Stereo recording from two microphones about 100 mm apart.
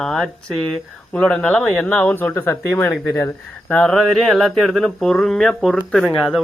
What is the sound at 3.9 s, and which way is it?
Speech, centre (ahead or behind).